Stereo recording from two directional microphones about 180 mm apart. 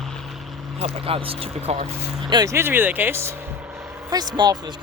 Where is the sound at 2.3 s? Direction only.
20° right (ahead or behind).